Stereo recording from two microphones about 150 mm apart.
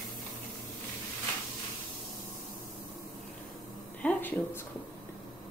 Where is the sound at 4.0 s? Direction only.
10° left (ahead or behind).